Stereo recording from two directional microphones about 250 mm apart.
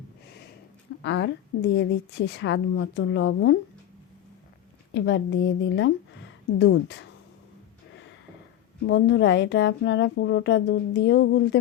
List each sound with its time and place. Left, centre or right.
1.0 s speech: left
4.9 s a woman's voice: left
8.9 s speech: left